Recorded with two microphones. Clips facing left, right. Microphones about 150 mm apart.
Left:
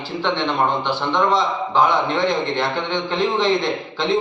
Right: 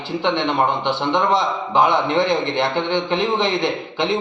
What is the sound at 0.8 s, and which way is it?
A man's voice, 20° right (ahead or behind).